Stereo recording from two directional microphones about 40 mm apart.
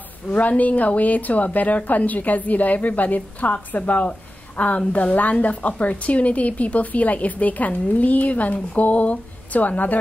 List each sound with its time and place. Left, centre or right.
0.3 s a woman's voice: left